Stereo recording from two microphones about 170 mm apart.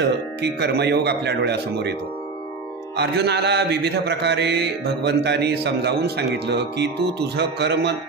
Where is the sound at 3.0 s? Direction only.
80° right.